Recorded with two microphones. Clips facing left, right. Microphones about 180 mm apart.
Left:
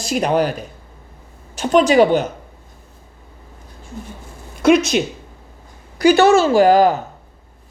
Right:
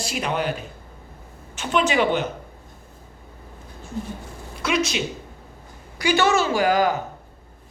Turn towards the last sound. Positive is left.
turn(degrees=40)  # may be behind; listen again after turning